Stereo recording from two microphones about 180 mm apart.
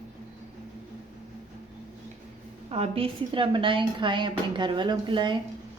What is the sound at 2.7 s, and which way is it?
A woman's voice, 30° right (ahead or behind).